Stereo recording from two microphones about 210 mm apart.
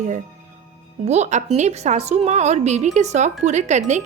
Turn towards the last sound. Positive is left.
turn(degrees=-35)  # may be behind; listen again after turning